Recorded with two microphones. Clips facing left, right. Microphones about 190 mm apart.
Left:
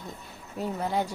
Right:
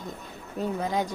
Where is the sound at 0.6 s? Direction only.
15° right (ahead or behind).